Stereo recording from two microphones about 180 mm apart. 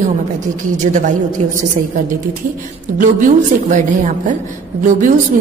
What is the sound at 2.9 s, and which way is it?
Speech, 45° right (ahead or behind).